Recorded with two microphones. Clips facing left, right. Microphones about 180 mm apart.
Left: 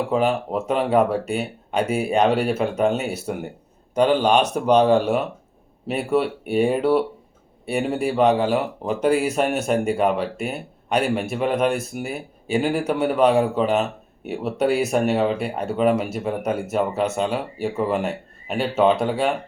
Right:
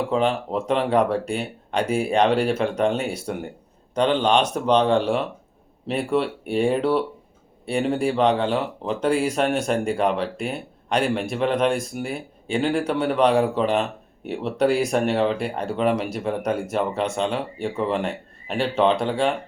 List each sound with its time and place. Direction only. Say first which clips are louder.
0.1 s speech: left 1 dB; 5° left (ahead or behind)